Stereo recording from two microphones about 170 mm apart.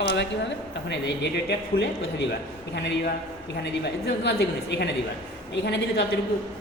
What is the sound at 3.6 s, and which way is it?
A woman's voice, 75° left (ahead or behind).